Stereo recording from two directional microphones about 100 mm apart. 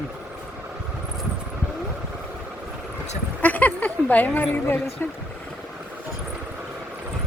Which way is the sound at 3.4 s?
15° left (ahead or behind).